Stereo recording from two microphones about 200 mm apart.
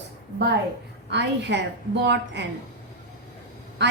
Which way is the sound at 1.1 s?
60° right (ahead or behind).